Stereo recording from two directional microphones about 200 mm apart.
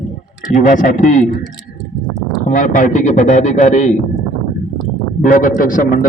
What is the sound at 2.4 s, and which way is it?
A man's voice, 40° left (ahead or behind).